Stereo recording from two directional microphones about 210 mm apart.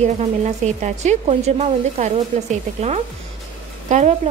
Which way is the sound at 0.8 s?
30° right (ahead or behind).